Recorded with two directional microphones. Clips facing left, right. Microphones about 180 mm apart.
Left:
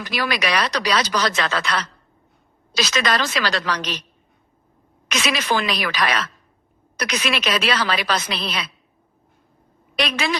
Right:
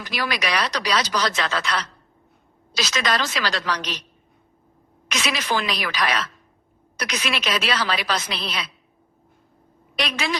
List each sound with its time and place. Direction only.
0.1 s a woman's voice: 65° left (ahead or behind)
2.7 s a woman's voice: 65° left (ahead or behind)
5.0 s a woman's voice: 65° left (ahead or behind)
9.9 s a woman's voice: 65° left (ahead or behind)